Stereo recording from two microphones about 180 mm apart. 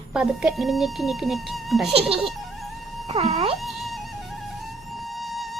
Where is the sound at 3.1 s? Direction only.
35° right (ahead or behind).